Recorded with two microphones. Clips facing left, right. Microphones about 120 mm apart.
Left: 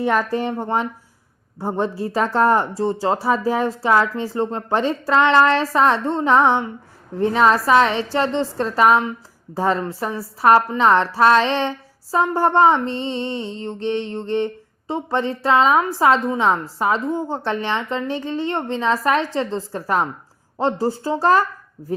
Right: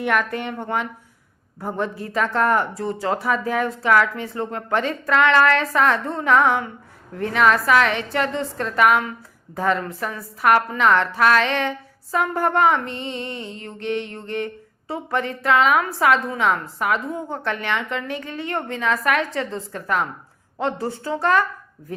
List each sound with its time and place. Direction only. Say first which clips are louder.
0.0 s a woman's voice: left 3 dB; 30° left (ahead or behind)